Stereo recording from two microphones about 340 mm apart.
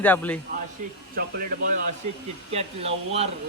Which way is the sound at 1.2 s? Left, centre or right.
Right.